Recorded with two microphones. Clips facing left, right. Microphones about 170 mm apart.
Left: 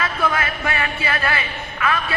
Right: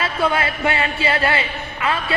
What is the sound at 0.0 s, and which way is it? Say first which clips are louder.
A man's voice: right 2 dB; 30° right (ahead or behind).